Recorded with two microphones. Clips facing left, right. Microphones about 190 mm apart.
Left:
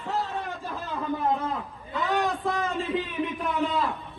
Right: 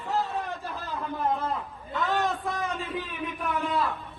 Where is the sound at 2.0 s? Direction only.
Centre (ahead or behind).